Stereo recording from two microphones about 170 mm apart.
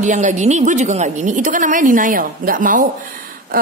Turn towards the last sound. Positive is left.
turn(degrees=-55)  # may be behind; listen again after turning